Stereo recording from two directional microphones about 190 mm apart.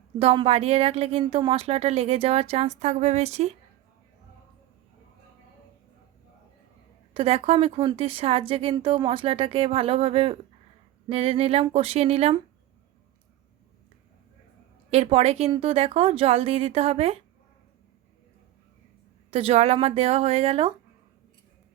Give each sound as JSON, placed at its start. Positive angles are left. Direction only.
{"t": 0.2, "sound": "a woman's voice", "side_deg": -30}
{"t": 7.1, "sound": "a woman's voice", "side_deg": -30}
{"t": 14.8, "sound": "a woman's voice", "side_deg": -30}
{"t": 19.3, "sound": "a woman's voice", "side_deg": -30}